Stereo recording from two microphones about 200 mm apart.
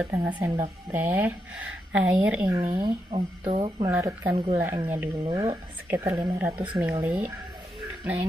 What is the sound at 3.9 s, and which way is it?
Speech, 15° right (ahead or behind).